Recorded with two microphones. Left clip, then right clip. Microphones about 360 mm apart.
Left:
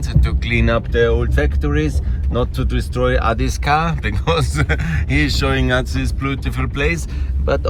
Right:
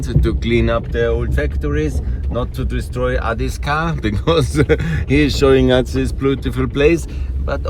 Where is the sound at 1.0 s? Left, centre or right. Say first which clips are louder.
Left 1 dB; left.